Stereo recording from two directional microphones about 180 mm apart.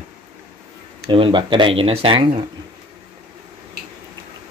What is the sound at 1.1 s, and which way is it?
Speech, 30° right (ahead or behind).